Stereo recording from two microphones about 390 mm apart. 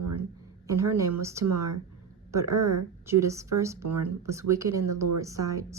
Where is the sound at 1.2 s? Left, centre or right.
Centre.